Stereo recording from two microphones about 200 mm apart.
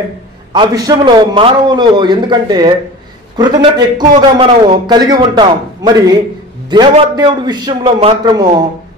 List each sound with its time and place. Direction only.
0.5 s a man's voice: 20° right (ahead or behind)